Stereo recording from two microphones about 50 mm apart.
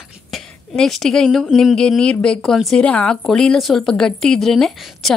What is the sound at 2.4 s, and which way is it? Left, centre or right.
Speech, centre.